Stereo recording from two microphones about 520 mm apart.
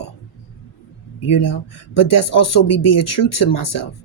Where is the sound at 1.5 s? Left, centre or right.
Left.